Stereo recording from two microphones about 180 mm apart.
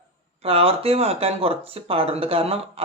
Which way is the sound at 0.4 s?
30° right (ahead or behind).